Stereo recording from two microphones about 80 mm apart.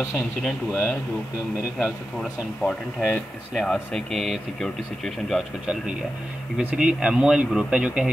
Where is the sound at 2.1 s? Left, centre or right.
Centre.